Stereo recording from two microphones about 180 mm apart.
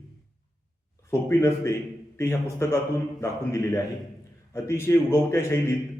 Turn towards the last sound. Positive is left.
turn(degrees=15)  # may be behind; listen again after turning